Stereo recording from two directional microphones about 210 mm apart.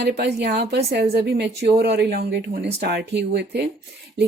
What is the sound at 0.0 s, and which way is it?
Speech, 50° right (ahead or behind).